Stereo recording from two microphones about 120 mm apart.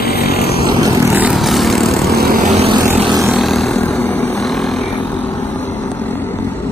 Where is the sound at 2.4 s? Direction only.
70° right (ahead or behind).